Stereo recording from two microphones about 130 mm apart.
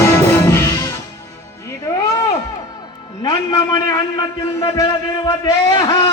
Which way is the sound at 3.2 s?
30° left (ahead or behind).